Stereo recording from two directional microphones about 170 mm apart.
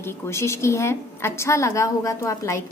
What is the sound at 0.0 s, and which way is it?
A woman's voice, 15° left (ahead or behind).